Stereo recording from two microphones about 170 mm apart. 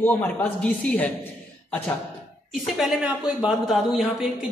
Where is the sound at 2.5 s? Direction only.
Centre (ahead or behind).